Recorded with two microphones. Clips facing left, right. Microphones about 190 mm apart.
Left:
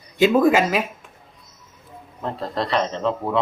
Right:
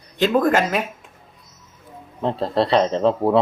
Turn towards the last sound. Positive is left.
turn(degrees=-35)  # may be behind; listen again after turning